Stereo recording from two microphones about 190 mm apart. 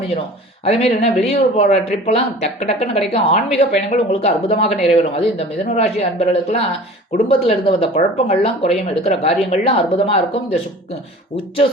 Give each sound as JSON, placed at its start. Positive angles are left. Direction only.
{"t": 0.6, "sound": "speech", "side_deg": 35}